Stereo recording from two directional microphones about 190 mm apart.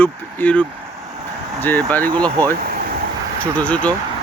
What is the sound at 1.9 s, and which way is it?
Speech, 10° left (ahead or behind).